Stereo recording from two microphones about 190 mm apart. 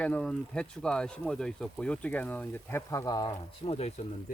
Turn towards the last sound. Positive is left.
turn(degrees=35)  # may be behind; listen again after turning